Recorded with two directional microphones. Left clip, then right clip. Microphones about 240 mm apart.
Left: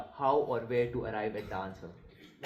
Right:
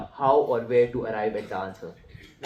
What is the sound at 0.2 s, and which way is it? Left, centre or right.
Speech, left.